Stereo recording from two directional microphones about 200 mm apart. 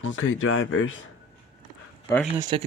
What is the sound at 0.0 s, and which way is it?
Speech, 75° left (ahead or behind).